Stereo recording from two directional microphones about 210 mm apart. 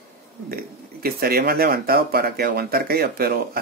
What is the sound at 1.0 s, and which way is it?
Speech, 45° right (ahead or behind).